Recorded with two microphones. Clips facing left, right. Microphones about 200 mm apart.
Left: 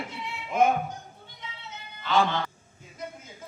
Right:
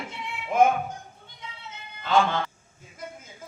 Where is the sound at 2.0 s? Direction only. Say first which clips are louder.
Right 2 dB; 50° right (ahead or behind).